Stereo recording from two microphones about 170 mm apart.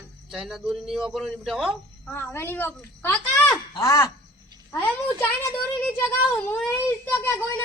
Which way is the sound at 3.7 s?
20° left (ahead or behind).